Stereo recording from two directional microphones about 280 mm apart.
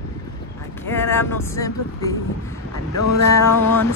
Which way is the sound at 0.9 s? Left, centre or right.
Centre.